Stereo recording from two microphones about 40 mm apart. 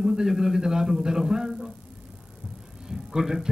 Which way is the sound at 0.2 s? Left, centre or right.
Centre.